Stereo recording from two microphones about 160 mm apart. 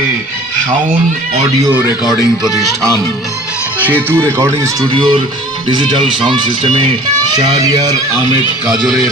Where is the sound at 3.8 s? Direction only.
10° right (ahead or behind).